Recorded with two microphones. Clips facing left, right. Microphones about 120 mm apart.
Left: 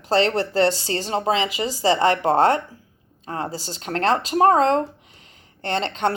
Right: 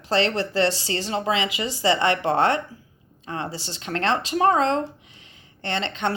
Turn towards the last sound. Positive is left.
turn(degrees=40)  # may be behind; listen again after turning